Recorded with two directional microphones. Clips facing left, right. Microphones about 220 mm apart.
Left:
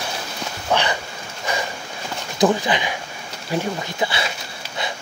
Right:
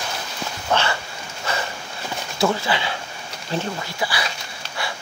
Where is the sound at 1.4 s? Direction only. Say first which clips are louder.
Left 2 dB; 15° left (ahead or behind).